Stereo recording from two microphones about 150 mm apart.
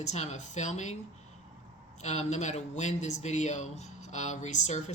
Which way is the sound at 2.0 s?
50° left (ahead or behind).